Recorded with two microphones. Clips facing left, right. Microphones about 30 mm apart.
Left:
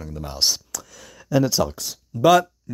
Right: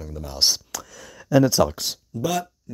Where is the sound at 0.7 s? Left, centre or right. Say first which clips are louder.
Right 1 dB; right.